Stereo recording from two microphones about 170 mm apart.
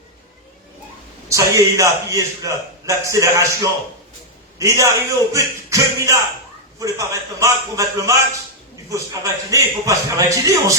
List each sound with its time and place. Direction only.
1.3 s a man's voice: 20° right (ahead or behind)
9.2 s a man's voice: 20° right (ahead or behind)